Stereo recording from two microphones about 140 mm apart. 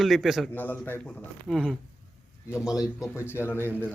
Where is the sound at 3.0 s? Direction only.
20° left (ahead or behind).